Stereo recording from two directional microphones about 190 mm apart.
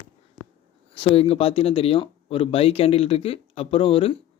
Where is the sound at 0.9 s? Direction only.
30° left (ahead or behind).